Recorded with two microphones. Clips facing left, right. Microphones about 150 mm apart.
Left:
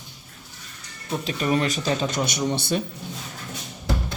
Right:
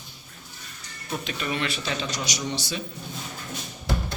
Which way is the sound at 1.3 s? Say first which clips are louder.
Left 7 dB; 40° left (ahead or behind).